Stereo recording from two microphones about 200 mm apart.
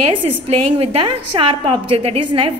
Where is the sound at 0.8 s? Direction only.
30° right (ahead or behind).